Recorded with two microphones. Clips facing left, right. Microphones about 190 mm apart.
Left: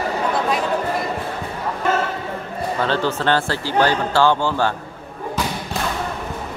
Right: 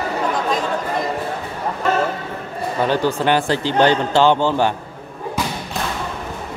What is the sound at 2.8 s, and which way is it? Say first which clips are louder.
Speech: right 3 dB; 15° right (ahead or behind).